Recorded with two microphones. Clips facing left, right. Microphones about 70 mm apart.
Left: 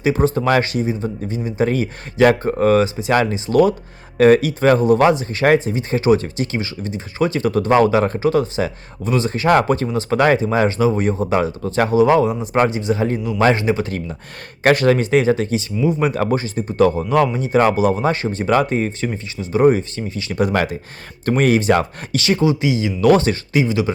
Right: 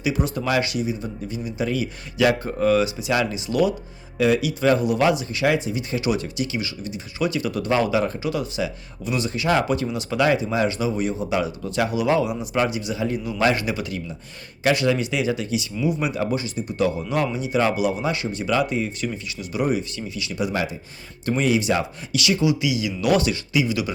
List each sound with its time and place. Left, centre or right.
0.0 s speech: left
14.6 s speech: left